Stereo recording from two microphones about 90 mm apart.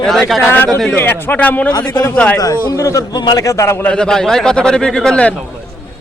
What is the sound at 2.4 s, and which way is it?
A man's voice, 40° left (ahead or behind).